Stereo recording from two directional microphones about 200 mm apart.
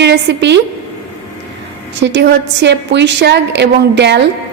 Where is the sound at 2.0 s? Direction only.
60° right (ahead or behind).